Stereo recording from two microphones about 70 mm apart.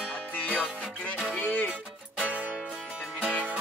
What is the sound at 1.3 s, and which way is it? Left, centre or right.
Music, left.